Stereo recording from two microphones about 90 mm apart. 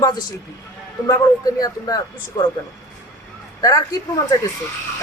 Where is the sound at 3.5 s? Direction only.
45° left (ahead or behind).